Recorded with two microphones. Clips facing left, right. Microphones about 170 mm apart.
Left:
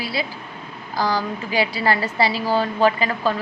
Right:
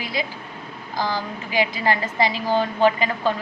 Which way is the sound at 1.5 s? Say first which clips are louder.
Left 1 dB; 15° right (ahead or behind).